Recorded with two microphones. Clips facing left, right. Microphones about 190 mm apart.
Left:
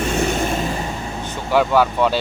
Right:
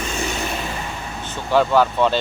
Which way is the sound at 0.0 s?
55° left (ahead or behind).